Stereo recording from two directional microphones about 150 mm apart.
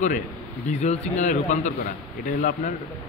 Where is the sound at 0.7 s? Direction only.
50° left (ahead or behind).